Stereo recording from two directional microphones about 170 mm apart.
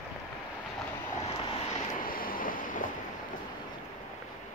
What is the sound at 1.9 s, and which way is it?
Vehicle, 55° left (ahead or behind).